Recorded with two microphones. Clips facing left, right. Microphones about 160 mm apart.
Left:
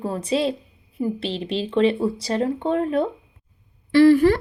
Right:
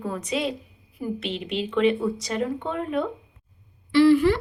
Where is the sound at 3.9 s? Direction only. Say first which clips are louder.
Left 3 dB; 45° left (ahead or behind).